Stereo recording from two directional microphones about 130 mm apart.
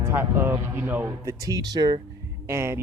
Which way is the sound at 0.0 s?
20° right (ahead or behind).